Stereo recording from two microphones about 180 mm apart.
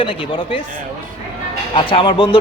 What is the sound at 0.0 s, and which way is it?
Speech, 25° left (ahead or behind).